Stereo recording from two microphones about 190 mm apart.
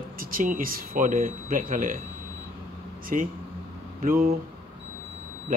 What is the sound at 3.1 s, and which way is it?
Speech, 45° right (ahead or behind).